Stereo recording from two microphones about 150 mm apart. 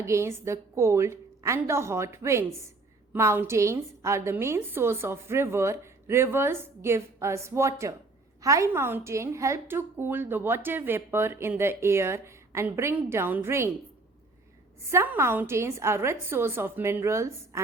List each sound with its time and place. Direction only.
0.0 s a woman's voice: 20° right (ahead or behind)
14.8 s a woman's voice: 15° right (ahead or behind)